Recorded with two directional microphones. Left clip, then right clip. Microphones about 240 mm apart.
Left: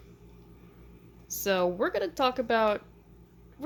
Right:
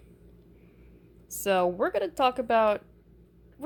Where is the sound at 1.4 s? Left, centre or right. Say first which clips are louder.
Right 2 dB; centre.